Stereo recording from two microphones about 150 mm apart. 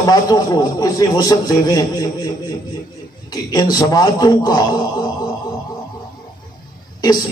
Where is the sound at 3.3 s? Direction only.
25° left (ahead or behind).